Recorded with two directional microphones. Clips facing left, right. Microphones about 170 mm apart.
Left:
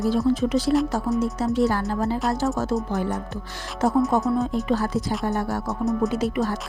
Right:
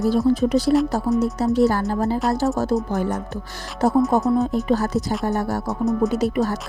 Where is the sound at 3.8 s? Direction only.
35° right (ahead or behind).